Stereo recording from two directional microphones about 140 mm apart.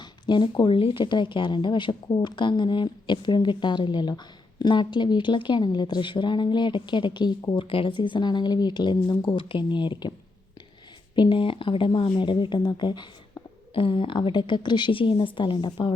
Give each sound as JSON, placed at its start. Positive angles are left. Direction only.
{"t": 0.0, "sound": "speech", "side_deg": 35}
{"t": 11.1, "sound": "speech", "side_deg": 35}